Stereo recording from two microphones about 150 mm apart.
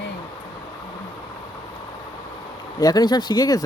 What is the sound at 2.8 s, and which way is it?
Speech, 25° left (ahead or behind).